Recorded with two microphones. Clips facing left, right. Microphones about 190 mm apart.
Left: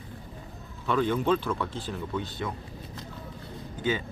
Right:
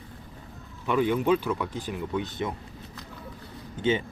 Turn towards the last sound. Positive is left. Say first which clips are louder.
# right 3 dB
turn(degrees=-25)  # may be behind; listen again after turning